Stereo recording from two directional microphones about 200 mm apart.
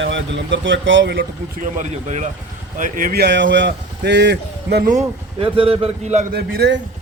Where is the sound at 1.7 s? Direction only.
35° right (ahead or behind).